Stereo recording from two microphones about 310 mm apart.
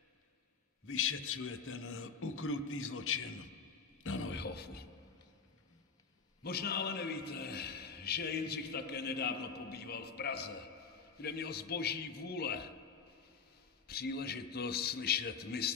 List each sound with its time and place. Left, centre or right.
0.8 s a man's voice: left
4.0 s music: left
6.4 s a man's voice: left
13.8 s a man's voice: left